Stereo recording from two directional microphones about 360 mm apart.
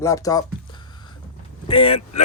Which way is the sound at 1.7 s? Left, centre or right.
Centre.